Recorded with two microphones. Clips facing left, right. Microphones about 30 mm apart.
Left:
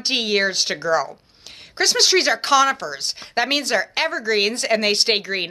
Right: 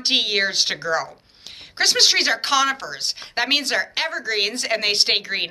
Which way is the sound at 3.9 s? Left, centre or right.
Centre.